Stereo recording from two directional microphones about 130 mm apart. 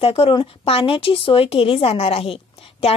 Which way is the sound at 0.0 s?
45° left (ahead or behind).